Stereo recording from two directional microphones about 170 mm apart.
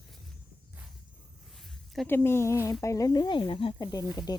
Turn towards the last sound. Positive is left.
turn(degrees=25)  # may be behind; listen again after turning